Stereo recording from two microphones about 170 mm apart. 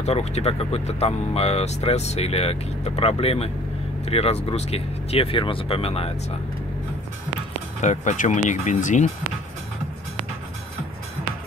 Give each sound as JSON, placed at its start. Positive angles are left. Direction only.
{"t": 0.0, "sound": "speech", "side_deg": 40}
{"t": 7.8, "sound": "speech", "side_deg": 45}